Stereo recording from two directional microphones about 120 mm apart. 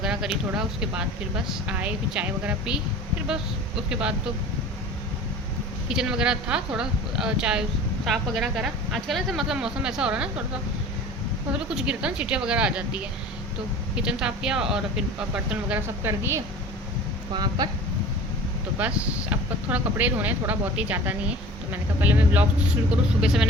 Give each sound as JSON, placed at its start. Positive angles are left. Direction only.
{"t": 0.0, "sound": "speech", "side_deg": -5}
{"t": 5.9, "sound": "speech", "side_deg": -5}
{"t": 11.7, "sound": "speech", "side_deg": -5}
{"t": 16.0, "sound": "a woman's voice", "side_deg": -20}
{"t": 17.3, "sound": "speech", "side_deg": -35}
{"t": 18.8, "sound": "speech", "side_deg": -10}